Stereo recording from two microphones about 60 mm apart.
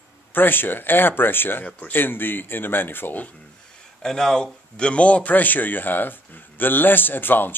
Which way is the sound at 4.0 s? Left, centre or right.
Centre.